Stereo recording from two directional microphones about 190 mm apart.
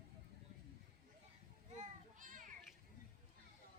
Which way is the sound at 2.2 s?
45° right (ahead or behind).